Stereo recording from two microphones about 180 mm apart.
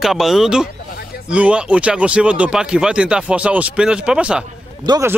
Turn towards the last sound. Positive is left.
turn(degrees=-20)  # may be behind; listen again after turning